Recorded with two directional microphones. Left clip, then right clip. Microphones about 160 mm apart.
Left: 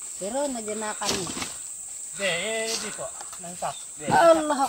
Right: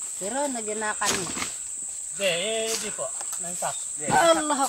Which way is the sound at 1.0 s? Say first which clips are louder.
Right 2 dB; 20° left (ahead or behind).